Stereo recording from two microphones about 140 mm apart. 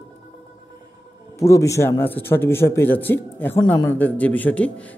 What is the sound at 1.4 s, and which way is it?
A man's voice, 20° left (ahead or behind).